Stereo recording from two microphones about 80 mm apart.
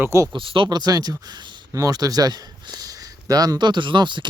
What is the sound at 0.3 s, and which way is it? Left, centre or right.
Speech, right.